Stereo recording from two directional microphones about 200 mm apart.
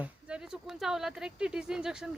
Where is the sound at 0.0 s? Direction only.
5° right (ahead or behind).